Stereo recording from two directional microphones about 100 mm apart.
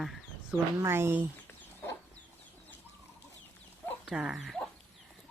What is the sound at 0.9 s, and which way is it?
Speech, 25° right (ahead or behind).